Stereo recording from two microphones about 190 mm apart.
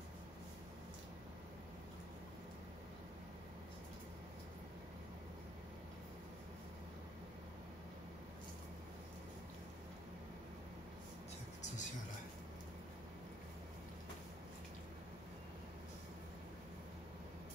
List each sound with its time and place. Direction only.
11.6 s music: 40° left (ahead or behind)